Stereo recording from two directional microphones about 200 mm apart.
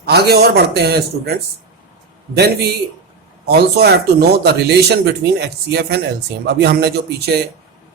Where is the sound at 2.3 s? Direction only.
55° right (ahead or behind).